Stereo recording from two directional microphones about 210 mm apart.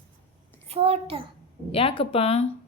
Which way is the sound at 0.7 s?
25° right (ahead or behind).